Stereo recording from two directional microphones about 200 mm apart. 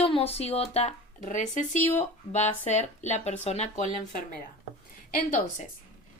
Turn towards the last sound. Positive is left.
turn(degrees=40)  # may be behind; listen again after turning